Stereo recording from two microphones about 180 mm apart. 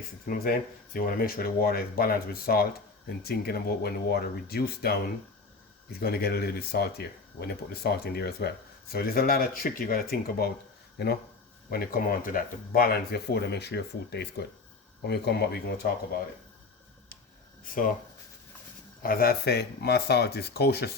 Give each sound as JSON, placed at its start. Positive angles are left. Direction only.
{"t": 0.3, "sound": "speech", "side_deg": 55}
{"t": 17.6, "sound": "speech", "side_deg": 50}
{"t": 19.0, "sound": "speech", "side_deg": 55}